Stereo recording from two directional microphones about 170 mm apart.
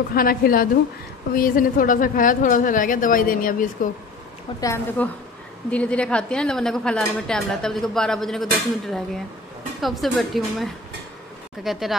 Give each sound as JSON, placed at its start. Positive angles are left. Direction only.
{"t": 0.1, "sound": "a woman's voice", "side_deg": 60}
{"t": 4.6, "sound": "a woman's voice", "side_deg": 15}